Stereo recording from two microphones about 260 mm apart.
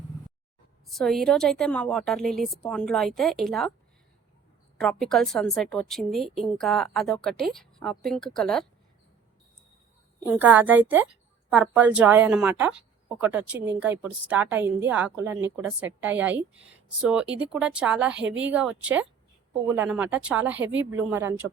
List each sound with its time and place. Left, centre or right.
0.9 s a woman's voice: centre
4.8 s a woman's voice: centre
10.2 s a woman's voice: centre
18.2 s a woman's voice: right
18.4 s a woman's voice: centre